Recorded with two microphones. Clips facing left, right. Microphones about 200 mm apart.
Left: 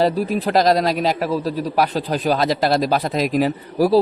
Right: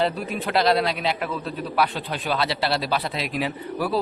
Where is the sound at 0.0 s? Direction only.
35° left (ahead or behind).